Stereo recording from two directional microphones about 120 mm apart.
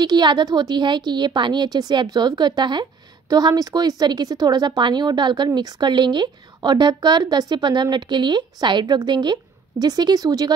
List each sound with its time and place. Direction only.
0.0 s a woman's voice: 40° right (ahead or behind)